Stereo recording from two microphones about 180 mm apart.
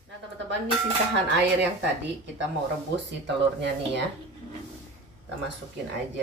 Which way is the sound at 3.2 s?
80° right.